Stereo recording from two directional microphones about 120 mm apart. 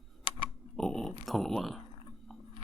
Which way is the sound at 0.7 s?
5° left (ahead or behind).